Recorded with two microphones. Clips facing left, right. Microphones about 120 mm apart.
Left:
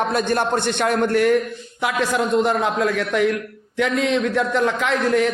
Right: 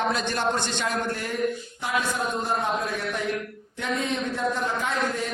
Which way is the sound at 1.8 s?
90° left.